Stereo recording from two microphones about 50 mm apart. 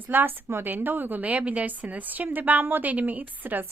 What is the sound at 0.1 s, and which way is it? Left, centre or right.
A woman's voice, right.